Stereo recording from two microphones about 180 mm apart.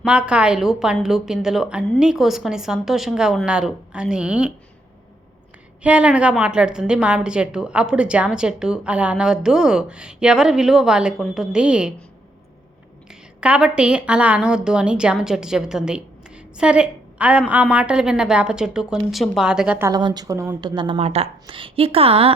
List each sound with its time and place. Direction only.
0.0 s a woman's voice: 5° right (ahead or behind)
5.8 s a woman's voice: 5° right (ahead or behind)
13.1 s a woman's voice: 5° right (ahead or behind)
19.9 s speech: 25° right (ahead or behind)